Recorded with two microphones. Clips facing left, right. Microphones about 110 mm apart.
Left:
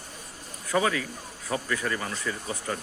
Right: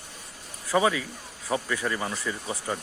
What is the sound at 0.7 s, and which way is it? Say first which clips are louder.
Speech: right 2 dB; 15° right (ahead or behind).